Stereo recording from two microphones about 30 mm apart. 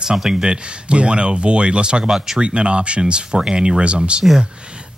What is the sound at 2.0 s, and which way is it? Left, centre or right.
Speech, centre.